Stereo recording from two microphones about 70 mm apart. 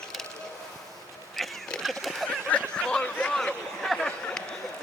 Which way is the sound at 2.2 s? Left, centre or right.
Centre.